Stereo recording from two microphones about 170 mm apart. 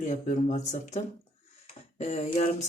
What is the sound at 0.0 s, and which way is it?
Speech, 45° left (ahead or behind).